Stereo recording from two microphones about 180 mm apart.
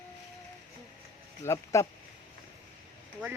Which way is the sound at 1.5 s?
15° left (ahead or behind).